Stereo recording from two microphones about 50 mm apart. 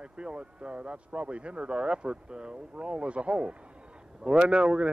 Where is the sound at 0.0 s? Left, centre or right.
Centre.